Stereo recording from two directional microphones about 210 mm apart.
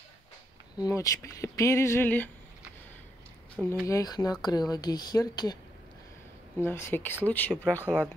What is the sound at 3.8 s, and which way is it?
Speech, 15° left (ahead or behind).